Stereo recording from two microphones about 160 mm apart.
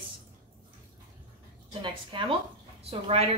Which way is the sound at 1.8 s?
30° right (ahead or behind).